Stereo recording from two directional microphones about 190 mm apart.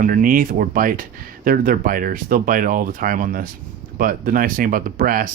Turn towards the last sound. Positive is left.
turn(degrees=-50)  # may be behind; listen again after turning